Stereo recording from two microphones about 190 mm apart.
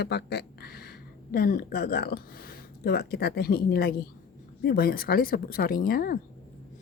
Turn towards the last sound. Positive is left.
turn(degrees=50)  # may be behind; listen again after turning